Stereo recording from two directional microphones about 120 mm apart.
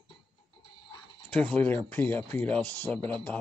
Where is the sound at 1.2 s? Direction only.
10° left (ahead or behind).